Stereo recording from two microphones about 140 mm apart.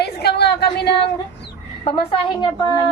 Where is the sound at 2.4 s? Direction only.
30° left (ahead or behind).